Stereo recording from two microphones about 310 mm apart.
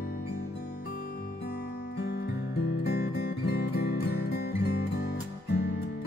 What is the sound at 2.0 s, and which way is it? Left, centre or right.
Music, left.